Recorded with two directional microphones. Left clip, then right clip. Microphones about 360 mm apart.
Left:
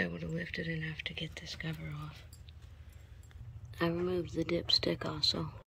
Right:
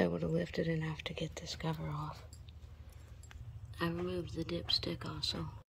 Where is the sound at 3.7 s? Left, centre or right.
Centre.